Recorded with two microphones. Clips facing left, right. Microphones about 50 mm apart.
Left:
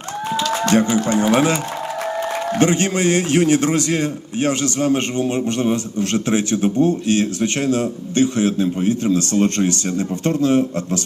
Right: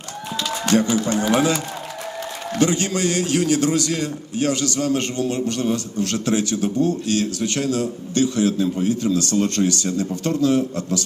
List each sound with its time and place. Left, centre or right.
0.8 s a man's voice: left
2.6 s a man's voice: left